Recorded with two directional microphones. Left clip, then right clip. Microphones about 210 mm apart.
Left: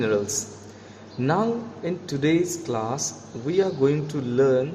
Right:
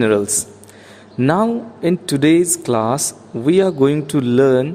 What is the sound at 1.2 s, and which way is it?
A man's voice, 50° right (ahead or behind).